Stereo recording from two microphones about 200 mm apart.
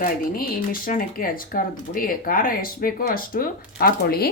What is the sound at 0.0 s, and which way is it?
Speech, 45° left (ahead or behind).